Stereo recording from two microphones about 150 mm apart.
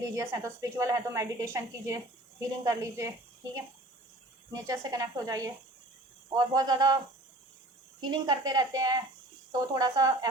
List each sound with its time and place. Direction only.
0.0 s a woman's voice: 20° right (ahead or behind)
4.5 s a woman's voice: 20° right (ahead or behind)
8.0 s a woman's voice: 30° right (ahead or behind)